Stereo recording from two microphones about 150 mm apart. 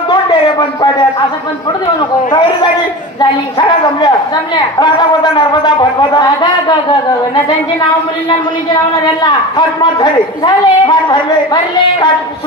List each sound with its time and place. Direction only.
3.2 s a man's voice: 30° left (ahead or behind)
9.2 s a man's voice: 30° left (ahead or behind)